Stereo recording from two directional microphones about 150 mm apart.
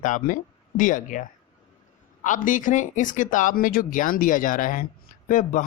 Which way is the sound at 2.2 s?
60° left (ahead or behind).